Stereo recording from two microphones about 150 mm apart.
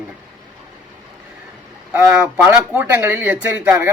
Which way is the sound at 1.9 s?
10° right (ahead or behind).